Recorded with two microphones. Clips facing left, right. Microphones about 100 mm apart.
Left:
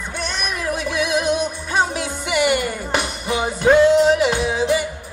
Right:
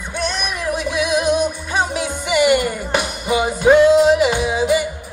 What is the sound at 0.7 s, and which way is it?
Music, 15° right (ahead or behind).